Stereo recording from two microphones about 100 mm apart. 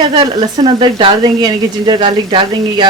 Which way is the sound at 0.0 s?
50° right (ahead or behind).